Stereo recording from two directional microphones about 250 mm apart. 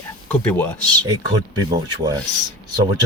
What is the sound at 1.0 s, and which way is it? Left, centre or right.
Speech, centre.